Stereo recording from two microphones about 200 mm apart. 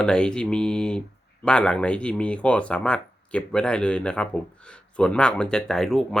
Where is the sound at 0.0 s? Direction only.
5° left (ahead or behind).